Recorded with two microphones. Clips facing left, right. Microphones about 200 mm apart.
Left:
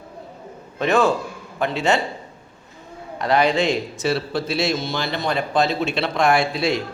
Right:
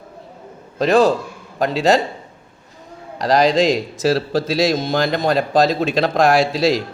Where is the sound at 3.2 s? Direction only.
35° right (ahead or behind).